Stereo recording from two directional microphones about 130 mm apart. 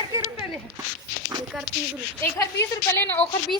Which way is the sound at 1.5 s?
Centre (ahead or behind).